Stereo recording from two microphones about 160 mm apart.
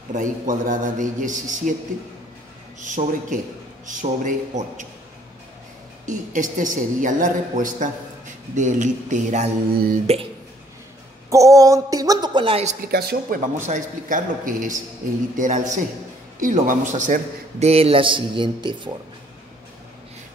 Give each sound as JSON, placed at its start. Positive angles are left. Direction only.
{"t": 0.1, "sound": "a woman's voice", "side_deg": -50}
{"t": 2.8, "sound": "a woman's voice", "side_deg": -50}
{"t": 6.0, "sound": "a woman's voice", "side_deg": -55}
{"t": 11.2, "sound": "a woman's voice", "side_deg": -20}
{"t": 12.8, "sound": "speech", "side_deg": -75}
{"t": 13.6, "sound": "a woman's voice", "side_deg": -50}